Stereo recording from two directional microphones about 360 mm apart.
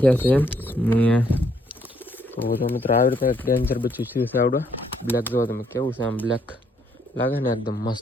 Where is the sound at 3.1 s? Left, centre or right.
Centre.